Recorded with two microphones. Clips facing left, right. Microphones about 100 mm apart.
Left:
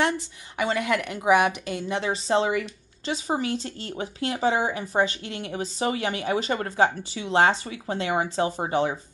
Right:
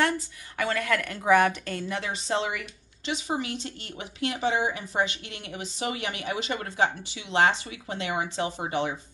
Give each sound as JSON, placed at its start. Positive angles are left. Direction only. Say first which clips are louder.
{"t": 0.6, "sound": "a woman's voice", "louder": "left 2 dB", "side_deg": 20}